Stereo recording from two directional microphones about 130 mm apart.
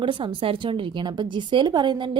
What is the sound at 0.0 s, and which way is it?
Speech, 40° right (ahead or behind).